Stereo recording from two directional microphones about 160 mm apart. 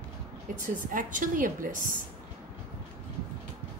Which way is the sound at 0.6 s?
55° right (ahead or behind).